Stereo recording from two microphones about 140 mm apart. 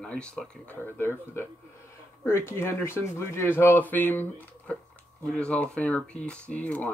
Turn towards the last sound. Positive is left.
turn(degrees=10)  # may be behind; listen again after turning